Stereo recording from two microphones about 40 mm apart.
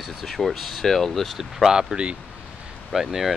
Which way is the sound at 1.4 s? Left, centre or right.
Centre.